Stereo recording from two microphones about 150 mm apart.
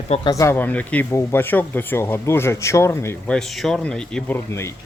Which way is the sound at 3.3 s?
Centre (ahead or behind).